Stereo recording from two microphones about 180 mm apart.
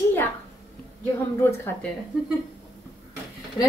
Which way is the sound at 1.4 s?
15° left (ahead or behind).